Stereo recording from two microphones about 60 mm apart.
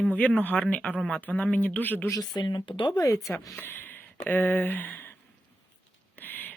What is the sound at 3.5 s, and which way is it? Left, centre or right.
Speech, left.